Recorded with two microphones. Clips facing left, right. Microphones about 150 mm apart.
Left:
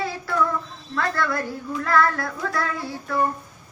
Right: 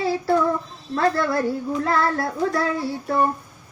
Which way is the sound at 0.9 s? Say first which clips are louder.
Right 4 dB; 30° right (ahead or behind).